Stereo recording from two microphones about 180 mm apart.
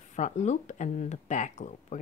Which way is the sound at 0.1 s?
40° left (ahead or behind).